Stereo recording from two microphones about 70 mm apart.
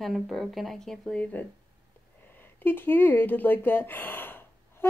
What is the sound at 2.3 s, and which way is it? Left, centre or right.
Speech, left.